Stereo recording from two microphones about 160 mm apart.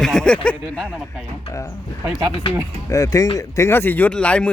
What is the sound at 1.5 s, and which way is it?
Speech, 20° left (ahead or behind).